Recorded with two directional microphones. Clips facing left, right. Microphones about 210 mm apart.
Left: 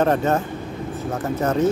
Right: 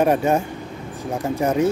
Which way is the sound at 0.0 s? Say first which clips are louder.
Right 1 dB; 10° right (ahead or behind).